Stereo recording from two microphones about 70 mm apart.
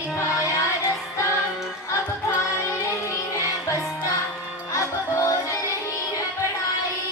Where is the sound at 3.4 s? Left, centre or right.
Left.